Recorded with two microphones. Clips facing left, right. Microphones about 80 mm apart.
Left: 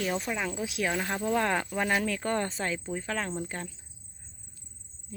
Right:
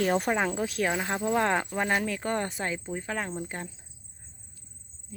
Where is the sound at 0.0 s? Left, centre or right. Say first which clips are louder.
Right 5 dB; right.